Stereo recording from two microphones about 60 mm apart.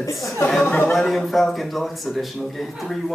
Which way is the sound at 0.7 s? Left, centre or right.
Left.